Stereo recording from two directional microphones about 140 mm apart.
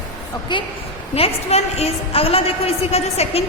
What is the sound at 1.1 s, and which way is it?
A woman's voice, 45° left (ahead or behind).